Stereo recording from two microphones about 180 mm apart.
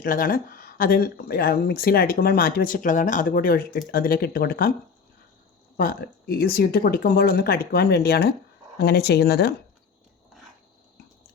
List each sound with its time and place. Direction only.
0.0 s speech: 50° left (ahead or behind)
5.7 s speech: 60° left (ahead or behind)